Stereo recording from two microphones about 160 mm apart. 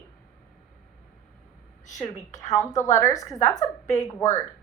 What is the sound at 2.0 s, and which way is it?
A woman's voice, 20° left (ahead or behind).